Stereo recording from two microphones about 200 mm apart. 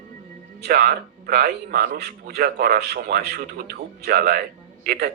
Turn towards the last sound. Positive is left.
turn(degrees=-55)  # may be behind; listen again after turning